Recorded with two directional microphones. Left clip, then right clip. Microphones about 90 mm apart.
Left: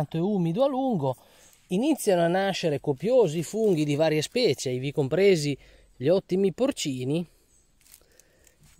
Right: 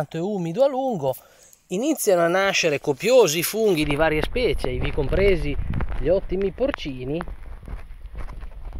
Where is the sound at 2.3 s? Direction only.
15° left (ahead or behind).